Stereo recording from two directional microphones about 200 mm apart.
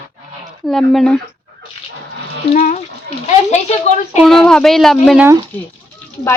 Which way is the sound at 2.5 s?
35° left (ahead or behind).